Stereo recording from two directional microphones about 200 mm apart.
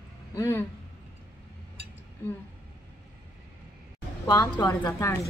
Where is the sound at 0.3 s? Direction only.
15° left (ahead or behind).